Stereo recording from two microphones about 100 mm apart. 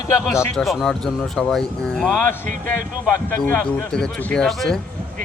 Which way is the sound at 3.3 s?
20° left (ahead or behind).